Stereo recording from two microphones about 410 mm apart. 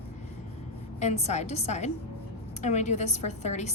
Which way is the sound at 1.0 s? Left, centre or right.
Centre.